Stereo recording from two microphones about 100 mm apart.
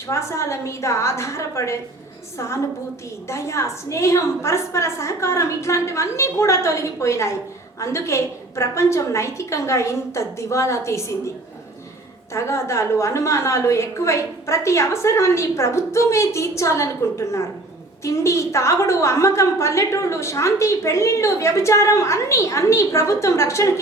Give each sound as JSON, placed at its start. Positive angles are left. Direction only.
{"t": 0.1, "sound": "a woman's voice", "side_deg": 30}
{"t": 3.2, "sound": "a woman's voice", "side_deg": 30}
{"t": 12.3, "sound": "a woman's voice", "side_deg": 30}